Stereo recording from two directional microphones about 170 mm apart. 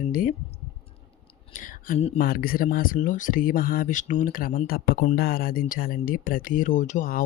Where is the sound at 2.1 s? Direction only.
60° left (ahead or behind).